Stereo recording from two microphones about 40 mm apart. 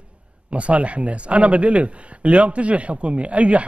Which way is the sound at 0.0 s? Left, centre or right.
Right.